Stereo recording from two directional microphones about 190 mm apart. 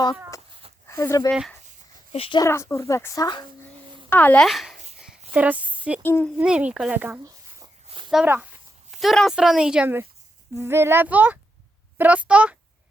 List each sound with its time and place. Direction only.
0.9 s speech: 15° left (ahead or behind)
1.3 s a woman's voice: centre (ahead or behind)
2.1 s speech: 30° left (ahead or behind)
2.4 s speech: 15° left (ahead or behind)
4.1 s a woman's voice: 10° left (ahead or behind); by 6.0 s 5° right (ahead or behind)
6.0 s speech: 10° left (ahead or behind)
6.4 s a child's voice: 5° right (ahead or behind)
7.9 s a sound: 25° right (ahead or behind)
8.1 s a child's voice: 5° right (ahead or behind)